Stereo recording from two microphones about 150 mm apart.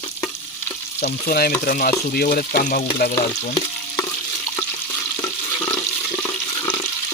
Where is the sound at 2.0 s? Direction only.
80° left.